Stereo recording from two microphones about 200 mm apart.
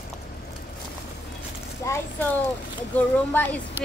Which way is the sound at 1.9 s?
15° left (ahead or behind).